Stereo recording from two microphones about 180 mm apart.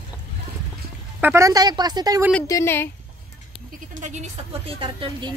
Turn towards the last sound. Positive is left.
turn(degrees=-25)  # may be behind; listen again after turning